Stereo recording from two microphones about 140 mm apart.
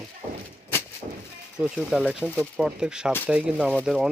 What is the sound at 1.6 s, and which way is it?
Speech, 5° right (ahead or behind).